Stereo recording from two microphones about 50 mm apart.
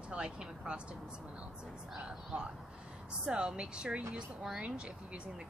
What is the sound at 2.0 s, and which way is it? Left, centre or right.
A woman's voice, right.